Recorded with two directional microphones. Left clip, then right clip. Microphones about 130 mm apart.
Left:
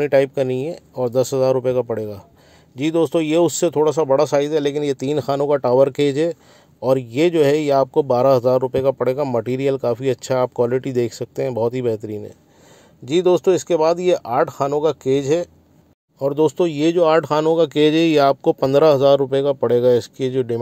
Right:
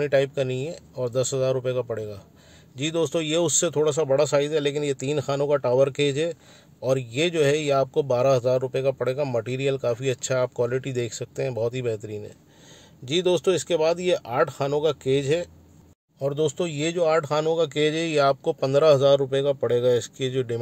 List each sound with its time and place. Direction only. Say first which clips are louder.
0.0 s a man's voice: left 6 dB; 45° left (ahead or behind)
13.0 s a man's voice: left 6 dB; 30° left (ahead or behind); by 17.1 s 50° left (ahead or behind)
17.1 s speech: left 6 dB; 65° left (ahead or behind)
17.5 s a man's voice: left 7 dB; 55° left (ahead or behind); by 20.5 s 35° left (ahead or behind)